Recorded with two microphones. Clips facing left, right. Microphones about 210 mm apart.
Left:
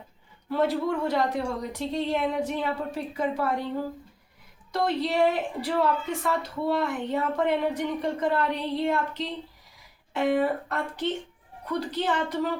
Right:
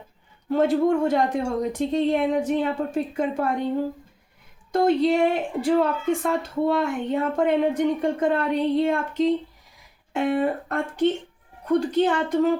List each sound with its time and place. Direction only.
0.4 s a woman's voice: 45° right (ahead or behind)
4.7 s a woman's voice: 50° right (ahead or behind)